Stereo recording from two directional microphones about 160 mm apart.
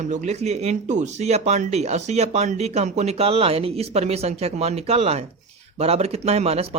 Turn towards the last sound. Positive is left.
turn(degrees=-40)  # may be behind; listen again after turning